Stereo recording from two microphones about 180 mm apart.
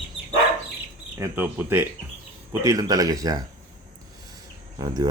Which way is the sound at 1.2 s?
10° right (ahead or behind).